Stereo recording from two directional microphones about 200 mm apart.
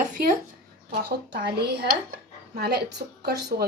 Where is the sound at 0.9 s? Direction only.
55° right (ahead or behind).